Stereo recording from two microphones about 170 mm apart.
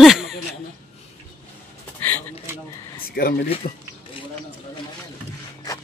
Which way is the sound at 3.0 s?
60° left (ahead or behind).